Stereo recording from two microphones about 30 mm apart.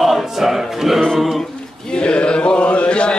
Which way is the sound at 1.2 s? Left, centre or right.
Centre.